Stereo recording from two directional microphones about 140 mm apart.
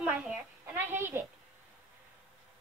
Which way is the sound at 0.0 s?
15° right (ahead or behind).